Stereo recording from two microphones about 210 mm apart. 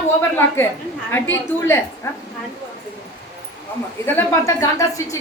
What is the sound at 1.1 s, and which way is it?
Speech, 10° left (ahead or behind).